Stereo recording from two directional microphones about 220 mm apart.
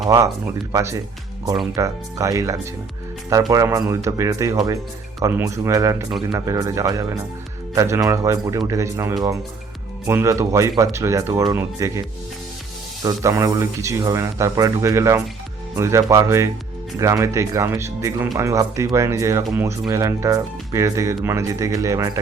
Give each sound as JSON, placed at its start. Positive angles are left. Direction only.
{"t": 0.7, "sound": "speech", "side_deg": -15}